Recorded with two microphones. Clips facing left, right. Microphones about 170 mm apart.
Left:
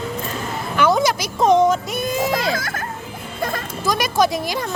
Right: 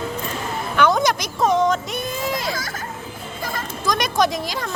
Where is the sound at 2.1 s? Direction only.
80° left; by 2.8 s 55° left (ahead or behind).